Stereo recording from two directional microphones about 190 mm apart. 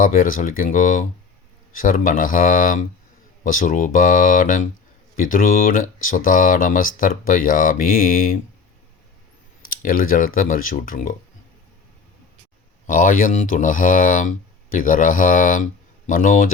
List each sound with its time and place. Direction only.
0.0 s speech: 45° left (ahead or behind)
9.6 s speech: 50° left (ahead or behind)
12.9 s speech: 45° left (ahead or behind)